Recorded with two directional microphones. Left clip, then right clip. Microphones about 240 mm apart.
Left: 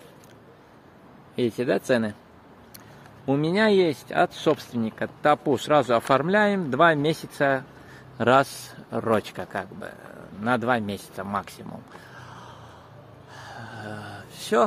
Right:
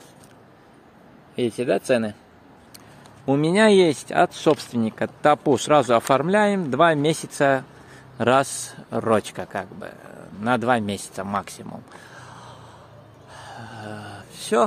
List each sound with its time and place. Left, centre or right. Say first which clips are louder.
1.6 s speech: right 3 dB; centre
3.3 s speech: right 4 dB; right
13.3 s a sound: right 1 dB; centre